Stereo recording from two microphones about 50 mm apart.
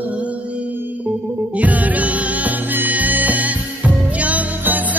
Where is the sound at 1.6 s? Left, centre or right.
Right.